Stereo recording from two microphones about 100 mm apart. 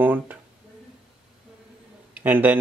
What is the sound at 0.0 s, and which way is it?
Speech, 20° right (ahead or behind).